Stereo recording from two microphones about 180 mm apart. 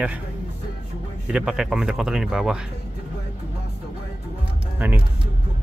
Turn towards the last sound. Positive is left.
turn(degrees=-10)  # may be behind; listen again after turning